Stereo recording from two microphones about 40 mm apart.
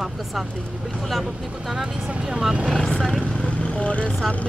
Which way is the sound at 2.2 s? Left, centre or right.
Centre.